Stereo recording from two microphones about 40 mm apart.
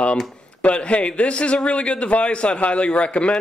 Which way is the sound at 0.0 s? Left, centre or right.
Left.